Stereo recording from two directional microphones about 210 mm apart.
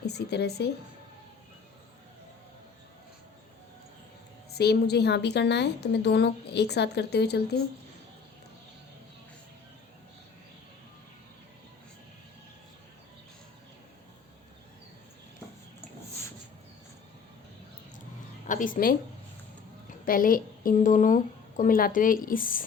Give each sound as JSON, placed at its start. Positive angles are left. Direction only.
{"t": 0.0, "sound": "a woman's voice", "side_deg": 50}
{"t": 4.5, "sound": "a woman's voice", "side_deg": 50}
{"t": 18.4, "sound": "a woman's voice", "side_deg": 40}
{"t": 20.1, "sound": "a woman's voice", "side_deg": 40}